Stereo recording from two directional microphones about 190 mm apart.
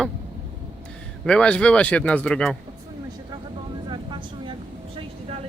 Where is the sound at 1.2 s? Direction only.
5° left (ahead or behind).